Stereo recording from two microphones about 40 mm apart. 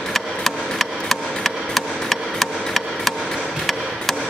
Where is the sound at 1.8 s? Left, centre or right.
Centre.